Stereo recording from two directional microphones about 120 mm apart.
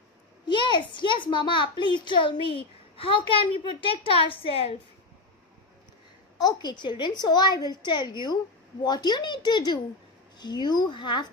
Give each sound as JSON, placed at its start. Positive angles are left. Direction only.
{"t": 0.5, "sound": "a woman's voice", "side_deg": 40}
{"t": 6.4, "sound": "speech", "side_deg": 35}